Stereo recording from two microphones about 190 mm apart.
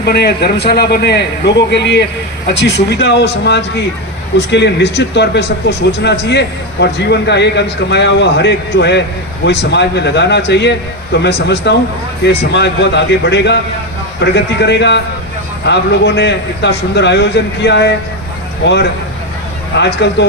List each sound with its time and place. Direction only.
0.0 s a man's voice: 60° left (ahead or behind)
19.7 s a man's voice: 65° left (ahead or behind)